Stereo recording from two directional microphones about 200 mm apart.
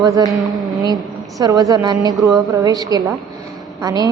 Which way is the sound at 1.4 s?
15° right (ahead or behind).